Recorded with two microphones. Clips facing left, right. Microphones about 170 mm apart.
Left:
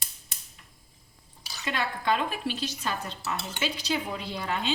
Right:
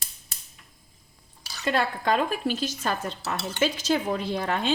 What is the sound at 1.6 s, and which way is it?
A woman's voice, 45° right (ahead or behind).